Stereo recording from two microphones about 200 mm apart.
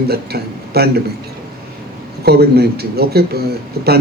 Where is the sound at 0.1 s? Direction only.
50° right (ahead or behind).